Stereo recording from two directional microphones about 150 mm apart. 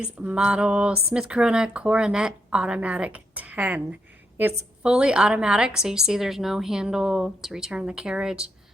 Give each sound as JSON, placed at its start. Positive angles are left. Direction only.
{"t": 0.0, "sound": "a woman's voice", "side_deg": -5}
{"t": 4.8, "sound": "a woman's voice", "side_deg": -5}